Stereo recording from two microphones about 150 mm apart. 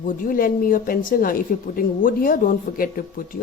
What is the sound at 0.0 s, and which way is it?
A woman's voice, 70° left (ahead or behind).